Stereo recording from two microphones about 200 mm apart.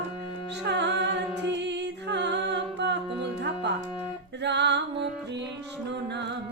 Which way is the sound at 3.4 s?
60° right (ahead or behind).